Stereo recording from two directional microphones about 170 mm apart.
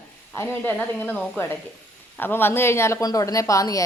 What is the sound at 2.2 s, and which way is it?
A woman's voice, 10° left (ahead or behind).